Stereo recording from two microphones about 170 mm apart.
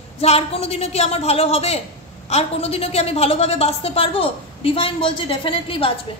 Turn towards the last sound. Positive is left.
turn(degrees=30)  # may be behind; listen again after turning